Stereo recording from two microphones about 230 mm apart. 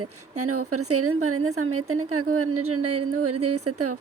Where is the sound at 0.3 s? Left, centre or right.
Right.